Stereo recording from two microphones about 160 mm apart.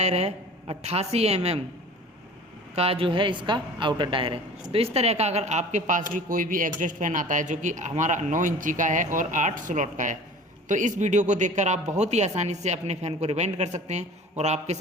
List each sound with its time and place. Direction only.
0.0 s a woman's voice: 45° right (ahead or behind)
2.7 s a woman's voice: 40° right (ahead or behind)